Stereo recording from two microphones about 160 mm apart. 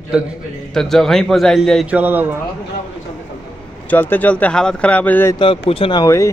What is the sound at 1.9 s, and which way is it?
Speech, 10° right (ahead or behind).